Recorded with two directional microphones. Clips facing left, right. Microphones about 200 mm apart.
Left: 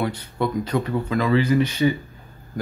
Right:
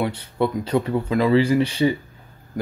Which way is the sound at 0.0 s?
30° right (ahead or behind).